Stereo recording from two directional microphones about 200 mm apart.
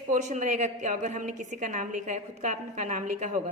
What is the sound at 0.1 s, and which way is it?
A woman's voice, 40° right (ahead or behind).